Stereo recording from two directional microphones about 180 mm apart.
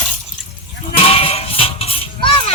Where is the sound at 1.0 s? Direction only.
30° left (ahead or behind).